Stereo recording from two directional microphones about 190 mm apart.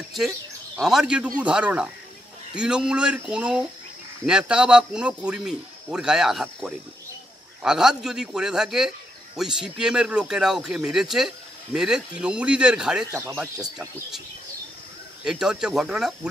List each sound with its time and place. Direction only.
0.7 s a man's voice: centre (ahead or behind)
13.2 s speech: 15° right (ahead or behind)
15.2 s a man's voice: 5° right (ahead or behind)